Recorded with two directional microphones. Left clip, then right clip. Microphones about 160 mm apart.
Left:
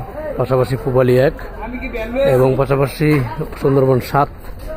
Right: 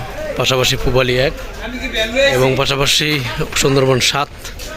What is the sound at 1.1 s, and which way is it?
Speech, 40° left (ahead or behind).